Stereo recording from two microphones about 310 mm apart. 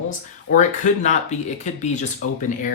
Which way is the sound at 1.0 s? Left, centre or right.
Left.